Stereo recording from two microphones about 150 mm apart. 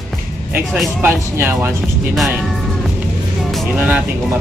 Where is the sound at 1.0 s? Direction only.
15° right (ahead or behind).